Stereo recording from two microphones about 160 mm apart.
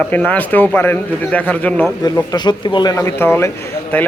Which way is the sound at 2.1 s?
25° left (ahead or behind).